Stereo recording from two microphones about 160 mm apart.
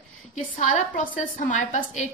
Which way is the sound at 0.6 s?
50° left (ahead or behind).